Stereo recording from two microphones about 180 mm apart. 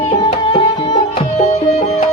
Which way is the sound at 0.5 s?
30° left (ahead or behind).